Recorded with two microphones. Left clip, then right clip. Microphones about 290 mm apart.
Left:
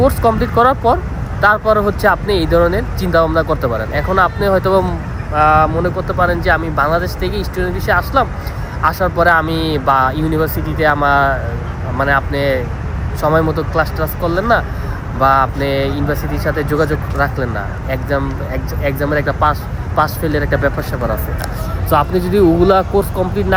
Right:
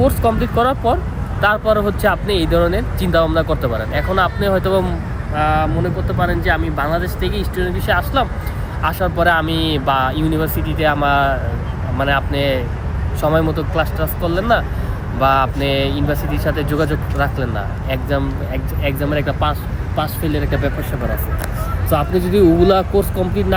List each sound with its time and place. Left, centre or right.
0.0 s speech: centre
21.8 s speech: centre